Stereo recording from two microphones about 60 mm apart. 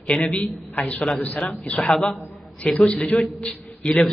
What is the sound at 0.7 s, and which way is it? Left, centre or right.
Speech, left.